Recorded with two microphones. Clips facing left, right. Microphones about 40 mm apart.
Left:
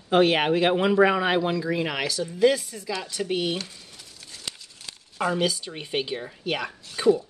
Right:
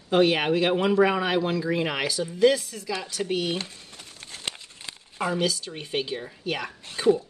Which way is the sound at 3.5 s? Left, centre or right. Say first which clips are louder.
Right 1 dB; right.